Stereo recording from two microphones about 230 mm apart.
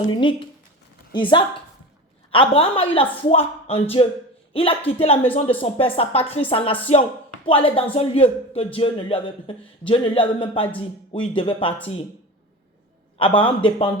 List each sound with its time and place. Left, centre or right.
0.2 s speech: left
6.9 s speech: left
7.4 s speech: left
13.1 s speech: left